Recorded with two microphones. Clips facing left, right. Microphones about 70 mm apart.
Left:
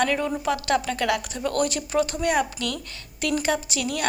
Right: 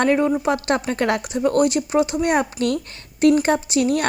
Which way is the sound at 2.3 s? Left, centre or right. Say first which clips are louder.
Right 5 dB; right.